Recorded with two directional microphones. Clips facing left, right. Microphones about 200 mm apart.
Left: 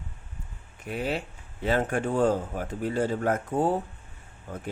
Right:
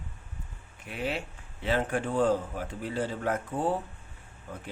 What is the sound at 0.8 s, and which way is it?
Speech, 40° left (ahead or behind).